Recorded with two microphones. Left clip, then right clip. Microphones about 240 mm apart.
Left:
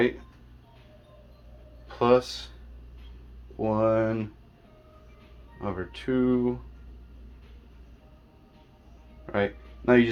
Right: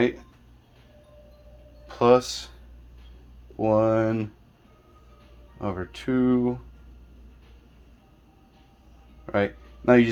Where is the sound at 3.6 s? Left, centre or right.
Right.